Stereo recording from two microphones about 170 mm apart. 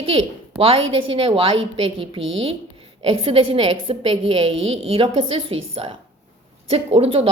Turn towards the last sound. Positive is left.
turn(degrees=-35)  # may be behind; listen again after turning